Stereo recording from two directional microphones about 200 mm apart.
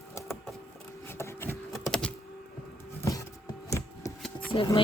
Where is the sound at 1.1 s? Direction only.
10° left (ahead or behind).